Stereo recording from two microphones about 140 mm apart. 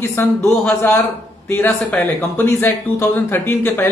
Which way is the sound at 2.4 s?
15° left (ahead or behind).